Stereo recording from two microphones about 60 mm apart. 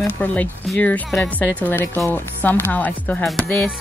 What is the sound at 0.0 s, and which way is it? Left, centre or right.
Speech, left.